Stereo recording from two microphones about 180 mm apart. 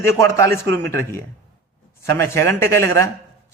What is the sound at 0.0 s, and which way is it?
A man's voice, 15° left (ahead or behind).